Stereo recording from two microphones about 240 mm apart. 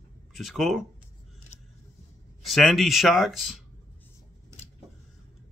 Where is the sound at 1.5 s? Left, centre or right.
Left.